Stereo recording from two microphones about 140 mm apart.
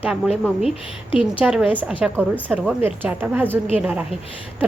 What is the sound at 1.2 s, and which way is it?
A woman's voice, 5° right (ahead or behind).